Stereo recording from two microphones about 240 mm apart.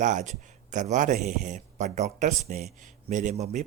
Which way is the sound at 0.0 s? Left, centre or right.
Right.